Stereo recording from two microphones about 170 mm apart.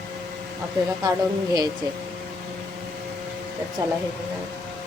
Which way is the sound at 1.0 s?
25° right (ahead or behind).